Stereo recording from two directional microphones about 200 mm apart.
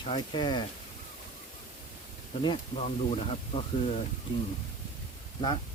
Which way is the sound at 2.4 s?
25° left (ahead or behind).